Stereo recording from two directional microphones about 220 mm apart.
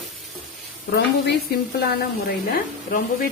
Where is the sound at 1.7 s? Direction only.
45° left (ahead or behind).